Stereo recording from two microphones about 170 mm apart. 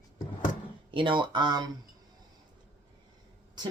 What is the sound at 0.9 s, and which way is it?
Speech, 30° right (ahead or behind).